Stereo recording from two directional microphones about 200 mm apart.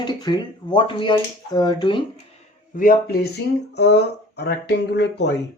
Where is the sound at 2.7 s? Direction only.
45° left (ahead or behind).